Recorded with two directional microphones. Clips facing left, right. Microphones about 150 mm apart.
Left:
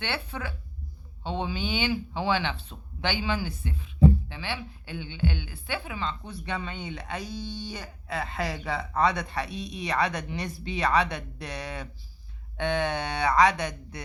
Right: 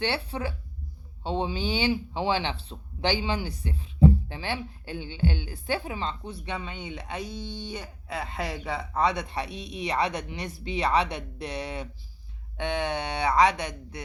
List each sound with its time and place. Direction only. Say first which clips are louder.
0.0 s a woman's voice: right 4 dB; 35° right (ahead or behind)